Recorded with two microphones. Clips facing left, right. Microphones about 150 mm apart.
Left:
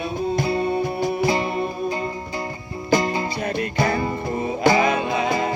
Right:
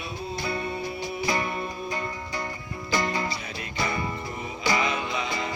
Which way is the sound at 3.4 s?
60° left (ahead or behind).